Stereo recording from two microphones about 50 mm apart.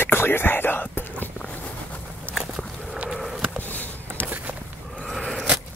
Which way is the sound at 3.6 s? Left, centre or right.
Left.